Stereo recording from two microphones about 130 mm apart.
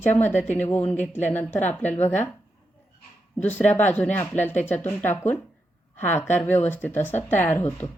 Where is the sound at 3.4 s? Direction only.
15° left (ahead or behind).